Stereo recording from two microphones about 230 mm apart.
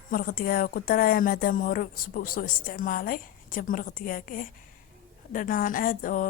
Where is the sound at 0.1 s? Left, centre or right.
Left.